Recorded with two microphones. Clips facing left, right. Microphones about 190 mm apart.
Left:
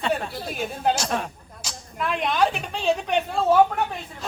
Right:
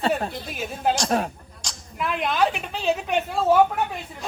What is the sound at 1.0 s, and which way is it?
Speech, 40° right (ahead or behind).